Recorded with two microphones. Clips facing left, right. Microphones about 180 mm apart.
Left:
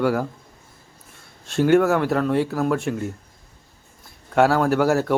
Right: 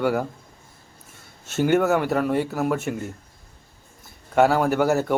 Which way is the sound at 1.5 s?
5° right (ahead or behind).